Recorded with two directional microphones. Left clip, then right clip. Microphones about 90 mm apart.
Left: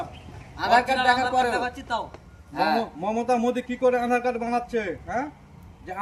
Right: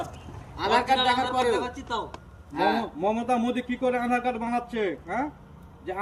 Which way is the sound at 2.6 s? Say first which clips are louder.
Left 1 dB; 25° left (ahead or behind).